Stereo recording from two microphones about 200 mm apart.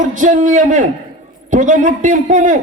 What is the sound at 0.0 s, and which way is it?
A man's voice, 40° right (ahead or behind).